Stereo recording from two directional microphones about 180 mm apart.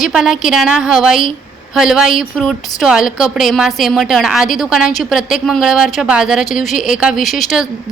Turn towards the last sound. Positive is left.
turn(degrees=0)  # may be behind; listen again after turning